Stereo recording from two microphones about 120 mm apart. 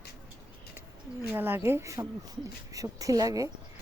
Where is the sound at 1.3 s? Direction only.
20° right (ahead or behind).